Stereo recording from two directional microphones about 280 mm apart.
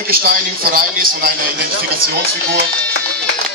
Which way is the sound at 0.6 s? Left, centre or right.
Right.